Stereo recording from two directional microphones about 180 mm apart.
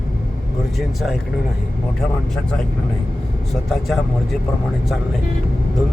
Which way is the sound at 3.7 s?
Centre (ahead or behind).